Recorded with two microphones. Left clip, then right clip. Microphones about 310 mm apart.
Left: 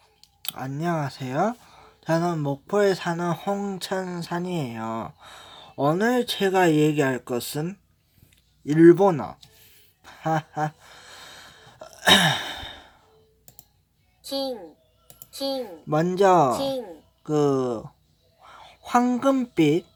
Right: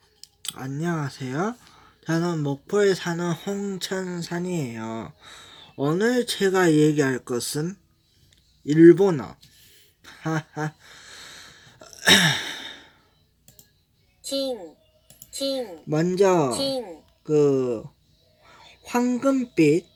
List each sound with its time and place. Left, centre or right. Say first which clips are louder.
0.4 s speech: left 2 dB; centre
10.0 s a sound: left 4 dB; centre
15.4 s speech: right 1 dB; centre